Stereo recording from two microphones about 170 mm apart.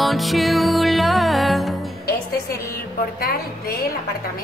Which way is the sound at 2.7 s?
60° left (ahead or behind).